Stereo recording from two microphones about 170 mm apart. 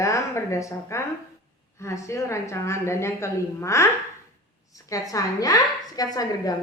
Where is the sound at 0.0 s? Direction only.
15° left (ahead or behind).